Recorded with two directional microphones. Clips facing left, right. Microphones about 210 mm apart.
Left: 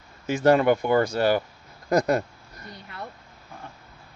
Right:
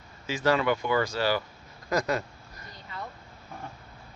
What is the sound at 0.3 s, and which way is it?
Speech, 50° left (ahead or behind).